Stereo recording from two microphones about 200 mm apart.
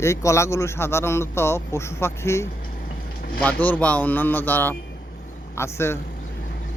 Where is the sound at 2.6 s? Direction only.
45° left (ahead or behind).